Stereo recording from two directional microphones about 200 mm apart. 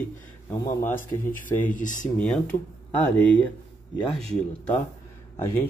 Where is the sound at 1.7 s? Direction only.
40° left (ahead or behind).